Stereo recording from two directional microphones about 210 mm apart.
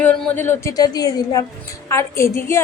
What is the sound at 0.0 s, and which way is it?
A woman's voice, 10° left (ahead or behind).